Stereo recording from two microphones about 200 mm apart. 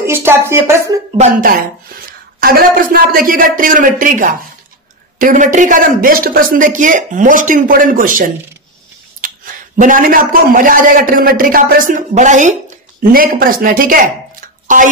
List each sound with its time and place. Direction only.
0.0 s speech: 10° right (ahead or behind)
1.1 s a woman's voice: 40° right (ahead or behind)